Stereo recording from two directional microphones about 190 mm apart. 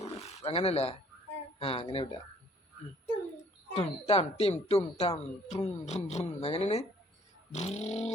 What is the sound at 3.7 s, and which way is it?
Speech, 30° left (ahead or behind).